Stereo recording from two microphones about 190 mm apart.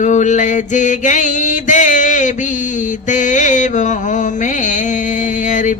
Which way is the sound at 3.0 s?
40° left (ahead or behind).